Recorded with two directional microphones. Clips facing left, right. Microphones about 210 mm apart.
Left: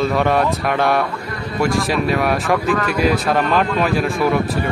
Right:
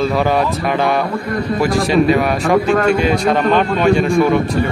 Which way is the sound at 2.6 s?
30° right (ahead or behind).